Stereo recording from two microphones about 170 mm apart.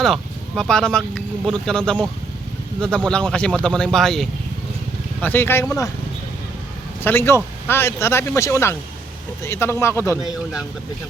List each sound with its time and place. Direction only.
0.0 s speech: centre (ahead or behind); by 5.9 s 15° left (ahead or behind)
7.0 s speech: 15° left (ahead or behind)